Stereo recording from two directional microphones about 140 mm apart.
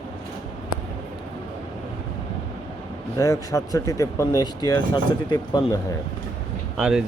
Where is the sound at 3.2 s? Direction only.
20° left (ahead or behind).